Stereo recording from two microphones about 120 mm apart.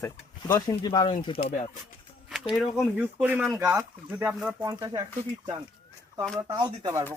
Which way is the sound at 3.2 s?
15° right (ahead or behind).